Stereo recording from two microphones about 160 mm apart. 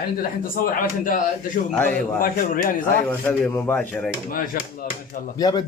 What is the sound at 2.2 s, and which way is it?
Speech, 60° left (ahead or behind).